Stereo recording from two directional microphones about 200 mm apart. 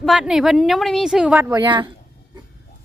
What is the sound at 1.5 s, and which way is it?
Speech, 20° right (ahead or behind).